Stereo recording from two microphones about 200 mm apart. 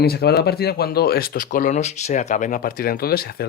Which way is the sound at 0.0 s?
50° left (ahead or behind).